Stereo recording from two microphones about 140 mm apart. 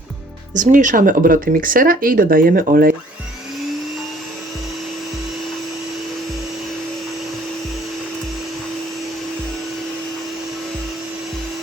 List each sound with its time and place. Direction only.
0.5 s speech: 65° right (ahead or behind); by 2.9 s 90° right